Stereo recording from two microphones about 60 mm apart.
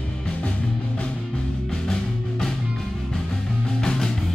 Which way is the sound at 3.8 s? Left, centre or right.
Centre.